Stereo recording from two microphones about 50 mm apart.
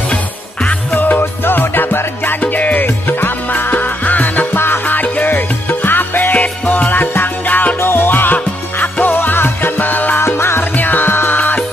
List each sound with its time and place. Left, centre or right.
0.9 s music: left
6.3 s music: left
7.8 s music: left
10.2 s music: left
10.8 s music: left